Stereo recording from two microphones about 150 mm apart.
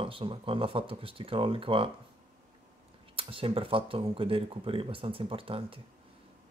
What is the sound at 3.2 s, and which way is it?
Speech, 35° right (ahead or behind).